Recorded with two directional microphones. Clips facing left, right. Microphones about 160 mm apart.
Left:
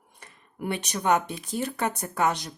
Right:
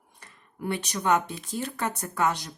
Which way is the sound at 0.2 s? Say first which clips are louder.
Left 1 dB; 20° left (ahead or behind).